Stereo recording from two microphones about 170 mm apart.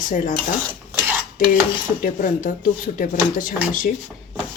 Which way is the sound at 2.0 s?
55° left (ahead or behind).